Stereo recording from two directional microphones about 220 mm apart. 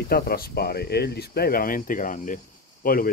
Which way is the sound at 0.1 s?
45° left (ahead or behind).